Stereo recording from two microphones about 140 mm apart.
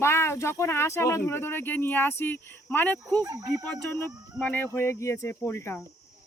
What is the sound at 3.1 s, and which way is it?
Speech, 25° right (ahead or behind).